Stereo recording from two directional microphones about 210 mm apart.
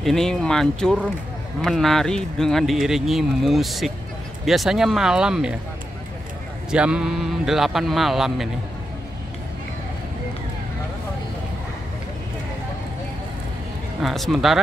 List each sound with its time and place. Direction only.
0.0 s speech: centre (ahead or behind)
6.7 s speech: 5° right (ahead or behind)
14.0 s speech: centre (ahead or behind)